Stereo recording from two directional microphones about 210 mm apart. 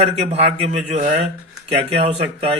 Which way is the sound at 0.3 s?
30° right (ahead or behind).